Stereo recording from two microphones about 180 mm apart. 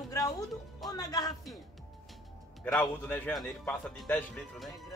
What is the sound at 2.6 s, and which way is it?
Speech, 10° left (ahead or behind).